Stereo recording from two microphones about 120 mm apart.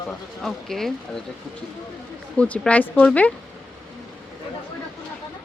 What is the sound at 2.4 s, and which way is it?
Speech, 10° left (ahead or behind).